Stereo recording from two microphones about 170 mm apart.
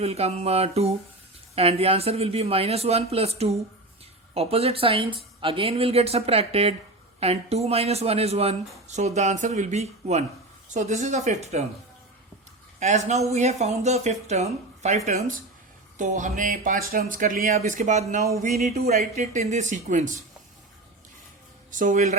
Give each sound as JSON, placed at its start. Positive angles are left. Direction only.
{"t": 0.0, "sound": "speech", "side_deg": -35}
{"t": 12.8, "sound": "speech", "side_deg": -40}
{"t": 21.7, "sound": "speech", "side_deg": -50}